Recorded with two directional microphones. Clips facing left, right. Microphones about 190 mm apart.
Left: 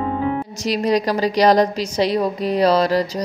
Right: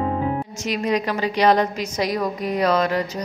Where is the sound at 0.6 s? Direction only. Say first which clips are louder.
Left 4 dB; 35° left (ahead or behind).